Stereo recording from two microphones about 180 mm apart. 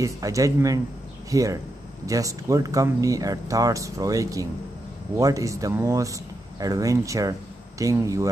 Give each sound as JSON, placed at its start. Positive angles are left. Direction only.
{"t": 0.0, "sound": "speech", "side_deg": -20}